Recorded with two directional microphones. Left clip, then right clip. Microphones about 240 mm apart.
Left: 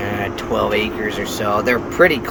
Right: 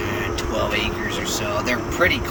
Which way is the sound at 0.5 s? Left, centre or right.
Centre.